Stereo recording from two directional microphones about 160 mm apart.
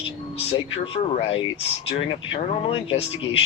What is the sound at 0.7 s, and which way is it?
Speech, 35° left (ahead or behind).